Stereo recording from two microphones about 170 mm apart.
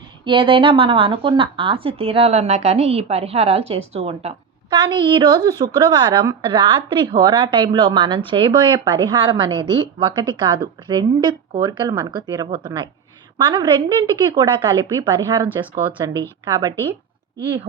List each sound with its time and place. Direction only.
0.3 s speech: 30° right (ahead or behind)
4.7 s a woman's voice: 25° right (ahead or behind)